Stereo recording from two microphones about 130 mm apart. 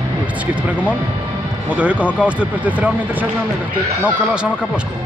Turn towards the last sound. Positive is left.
turn(degrees=-10)  # may be behind; listen again after turning